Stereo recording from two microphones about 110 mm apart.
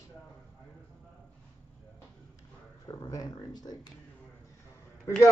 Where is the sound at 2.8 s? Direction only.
35° left (ahead or behind).